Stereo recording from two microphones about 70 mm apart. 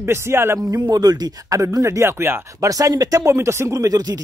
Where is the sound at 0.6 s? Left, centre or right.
Right.